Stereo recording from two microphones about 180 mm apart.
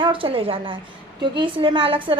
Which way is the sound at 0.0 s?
30° right (ahead or behind).